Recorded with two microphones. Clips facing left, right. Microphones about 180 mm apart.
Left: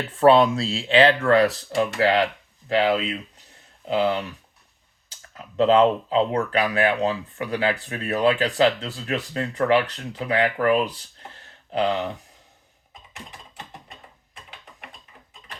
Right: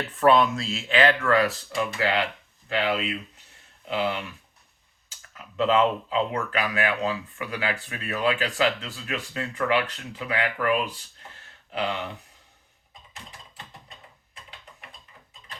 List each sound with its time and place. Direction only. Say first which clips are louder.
0.2 s speech: left 4 dB; 35° left (ahead or behind)
5.3 s speech: left 5 dB; 35° left (ahead or behind)